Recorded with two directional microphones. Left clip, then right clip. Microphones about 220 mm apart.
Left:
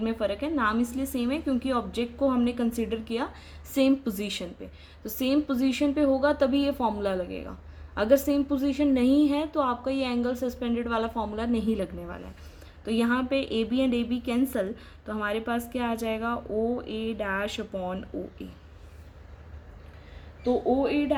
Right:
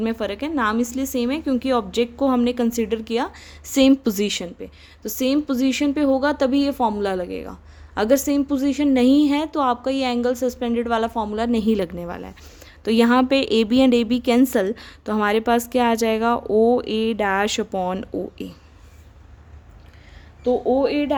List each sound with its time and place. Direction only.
0.0 s a woman's voice: 45° right (ahead or behind)
20.4 s a woman's voice: 55° right (ahead or behind)